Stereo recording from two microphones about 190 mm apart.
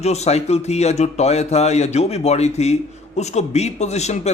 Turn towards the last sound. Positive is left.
turn(degrees=35)  # may be behind; listen again after turning